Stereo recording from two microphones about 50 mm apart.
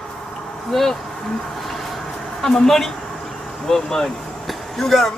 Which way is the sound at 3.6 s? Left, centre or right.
Centre.